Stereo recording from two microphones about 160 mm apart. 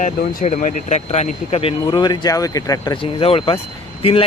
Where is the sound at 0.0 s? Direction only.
50° left (ahead or behind).